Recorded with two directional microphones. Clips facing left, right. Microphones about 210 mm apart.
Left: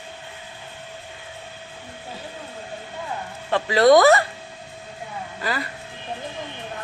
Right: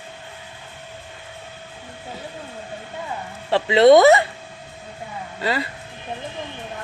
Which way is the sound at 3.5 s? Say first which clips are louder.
Right 3 dB; 25° right (ahead or behind).